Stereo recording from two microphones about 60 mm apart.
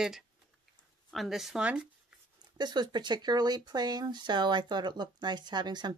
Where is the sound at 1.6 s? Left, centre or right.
Right.